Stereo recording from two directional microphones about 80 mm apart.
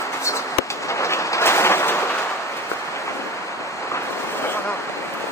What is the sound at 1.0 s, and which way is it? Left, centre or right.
Applause, left.